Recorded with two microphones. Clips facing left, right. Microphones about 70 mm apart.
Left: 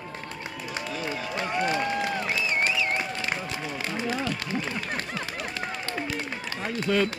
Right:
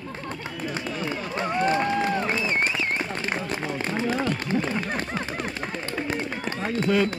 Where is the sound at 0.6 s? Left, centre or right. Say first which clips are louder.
Right 3 dB; right.